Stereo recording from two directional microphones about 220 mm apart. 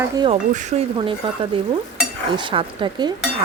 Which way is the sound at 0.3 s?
30° right (ahead or behind).